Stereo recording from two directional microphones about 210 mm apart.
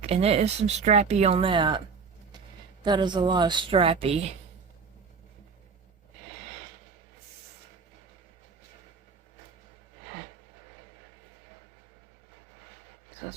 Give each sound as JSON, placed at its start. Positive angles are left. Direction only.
{"t": 0.0, "sound": "speech", "side_deg": -30}
{"t": 2.8, "sound": "speech", "side_deg": -20}